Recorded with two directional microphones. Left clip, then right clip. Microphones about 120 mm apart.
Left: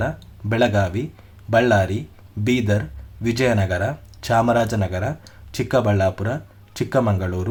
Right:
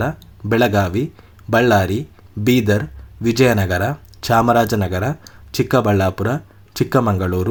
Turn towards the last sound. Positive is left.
turn(degrees=-35)  # may be behind; listen again after turning